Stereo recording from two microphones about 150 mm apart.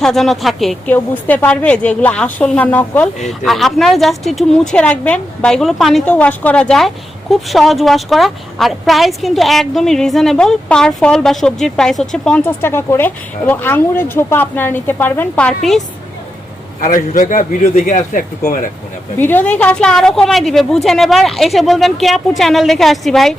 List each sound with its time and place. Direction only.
0.0 s a woman's voice: centre (ahead or behind)
16.8 s speech: 60° left (ahead or behind)
19.2 s a woman's voice: 10° left (ahead or behind)